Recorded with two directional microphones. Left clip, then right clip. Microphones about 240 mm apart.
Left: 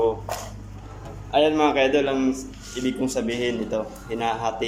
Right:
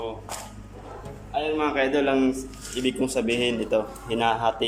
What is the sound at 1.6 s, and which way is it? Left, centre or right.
A man's voice, centre.